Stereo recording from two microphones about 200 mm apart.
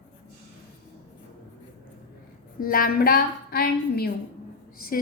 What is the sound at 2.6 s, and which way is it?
A woman's voice, 45° left (ahead or behind).